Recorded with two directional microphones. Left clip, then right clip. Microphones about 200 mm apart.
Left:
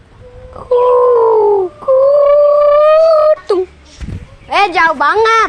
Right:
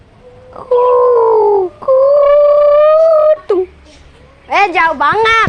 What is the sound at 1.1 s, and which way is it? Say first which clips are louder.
Bird: even; 10° right (ahead or behind).